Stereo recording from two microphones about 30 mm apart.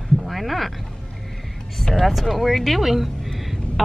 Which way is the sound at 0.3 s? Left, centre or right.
Centre.